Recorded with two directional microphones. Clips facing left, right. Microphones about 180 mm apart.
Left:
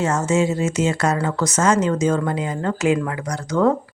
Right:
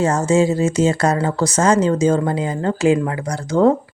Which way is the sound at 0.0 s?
35° right (ahead or behind).